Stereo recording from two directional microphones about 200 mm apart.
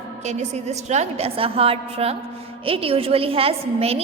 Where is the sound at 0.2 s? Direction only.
35° right (ahead or behind).